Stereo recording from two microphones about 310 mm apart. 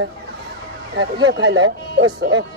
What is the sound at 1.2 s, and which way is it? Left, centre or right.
Speech, right.